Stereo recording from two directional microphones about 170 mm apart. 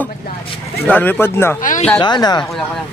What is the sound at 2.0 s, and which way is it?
Speech, 25° left (ahead or behind).